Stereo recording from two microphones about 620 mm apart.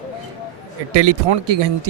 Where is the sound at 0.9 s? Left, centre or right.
Right.